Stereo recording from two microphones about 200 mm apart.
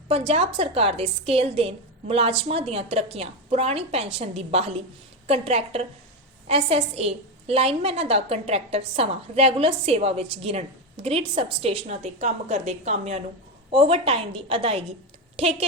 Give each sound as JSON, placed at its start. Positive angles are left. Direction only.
{"t": 0.1, "sound": "a woman's voice", "side_deg": -30}